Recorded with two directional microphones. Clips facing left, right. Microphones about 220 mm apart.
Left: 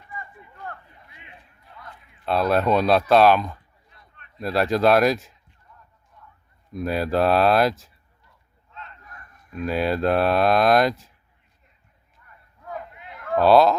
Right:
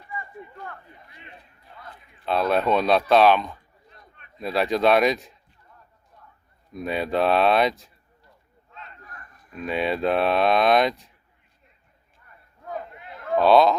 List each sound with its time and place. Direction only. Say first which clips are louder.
2.2 s speech: left 1 dB; centre (ahead or behind)
6.7 s speech: left 2 dB; centre (ahead or behind)
9.5 s speech: left 2 dB; centre (ahead or behind)
12.7 s a sound: right 2 dB; 25° right (ahead or behind)
13.3 s speech: left 1 dB; centre (ahead or behind)